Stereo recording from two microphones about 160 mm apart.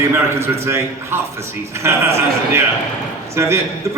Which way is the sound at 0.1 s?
15° right (ahead or behind).